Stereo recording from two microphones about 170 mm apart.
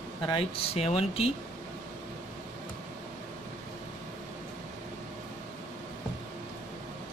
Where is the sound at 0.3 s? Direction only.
35° left (ahead or behind).